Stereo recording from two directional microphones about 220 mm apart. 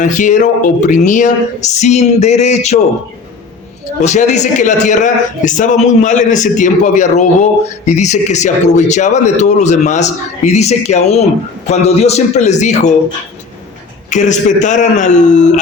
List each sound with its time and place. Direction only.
0.0 s speech: 35° left (ahead or behind)
4.0 s speech: 30° left (ahead or behind)
14.1 s speech: 35° left (ahead or behind)